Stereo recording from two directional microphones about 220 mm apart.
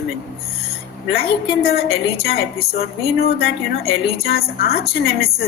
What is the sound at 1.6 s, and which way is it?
A woman's voice, 45° left (ahead or behind).